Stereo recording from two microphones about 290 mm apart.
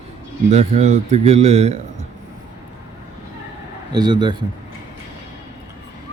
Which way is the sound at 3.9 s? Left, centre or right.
Centre.